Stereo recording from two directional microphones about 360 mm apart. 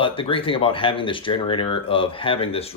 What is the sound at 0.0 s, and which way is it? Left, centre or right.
Speech, centre.